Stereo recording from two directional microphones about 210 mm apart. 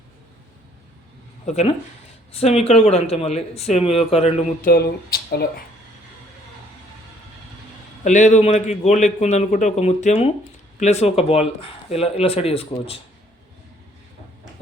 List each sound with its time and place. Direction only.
1.5 s a man's voice: 30° left (ahead or behind)
4.6 s speech: 45° left (ahead or behind)
8.0 s a man's voice: 35° left (ahead or behind)